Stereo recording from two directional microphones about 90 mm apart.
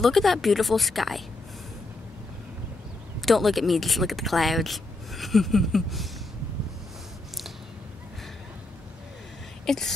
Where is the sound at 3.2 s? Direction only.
Centre (ahead or behind).